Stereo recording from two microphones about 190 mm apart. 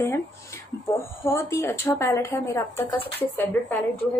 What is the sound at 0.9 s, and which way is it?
A woman's voice, 15° left (ahead or behind).